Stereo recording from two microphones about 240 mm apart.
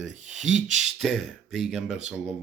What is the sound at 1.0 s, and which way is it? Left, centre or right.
Speech, centre.